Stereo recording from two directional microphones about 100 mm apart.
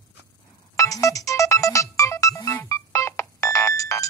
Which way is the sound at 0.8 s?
35° left (ahead or behind).